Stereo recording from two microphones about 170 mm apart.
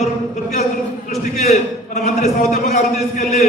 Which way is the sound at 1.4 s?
45° left (ahead or behind).